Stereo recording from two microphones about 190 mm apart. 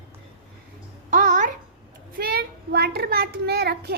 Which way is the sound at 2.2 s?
55° right (ahead or behind).